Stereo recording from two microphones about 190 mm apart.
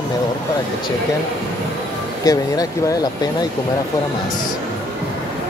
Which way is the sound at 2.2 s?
20° left (ahead or behind).